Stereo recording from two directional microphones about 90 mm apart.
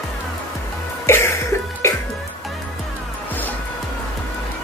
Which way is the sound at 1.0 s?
30° left (ahead or behind).